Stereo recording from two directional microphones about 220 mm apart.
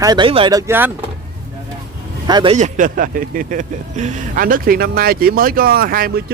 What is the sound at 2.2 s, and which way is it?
Speech, 20° right (ahead or behind).